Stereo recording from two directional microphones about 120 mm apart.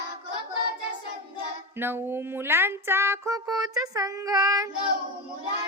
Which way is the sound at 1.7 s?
20° right (ahead or behind).